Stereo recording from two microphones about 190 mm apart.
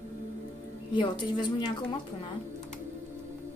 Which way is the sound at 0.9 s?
25° left (ahead or behind).